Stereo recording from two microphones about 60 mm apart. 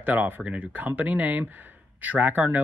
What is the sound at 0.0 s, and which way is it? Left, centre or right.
Speech, right.